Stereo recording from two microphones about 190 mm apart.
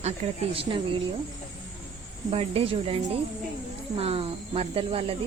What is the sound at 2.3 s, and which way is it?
Speech, 30° right (ahead or behind).